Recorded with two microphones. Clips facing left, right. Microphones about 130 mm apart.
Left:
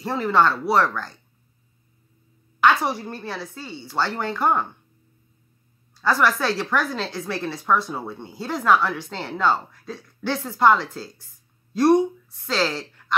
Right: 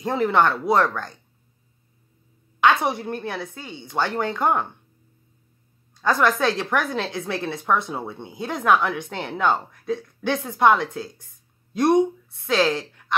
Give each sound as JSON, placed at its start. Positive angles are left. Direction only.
{"t": 0.0, "sound": "speech", "side_deg": -20}
{"t": 2.8, "sound": "speech", "side_deg": -20}
{"t": 5.9, "sound": "a woman's voice", "side_deg": -20}